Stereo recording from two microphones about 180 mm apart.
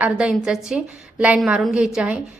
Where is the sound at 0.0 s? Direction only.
5° right (ahead or behind).